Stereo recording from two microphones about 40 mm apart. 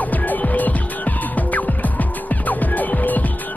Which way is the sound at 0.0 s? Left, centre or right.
Left.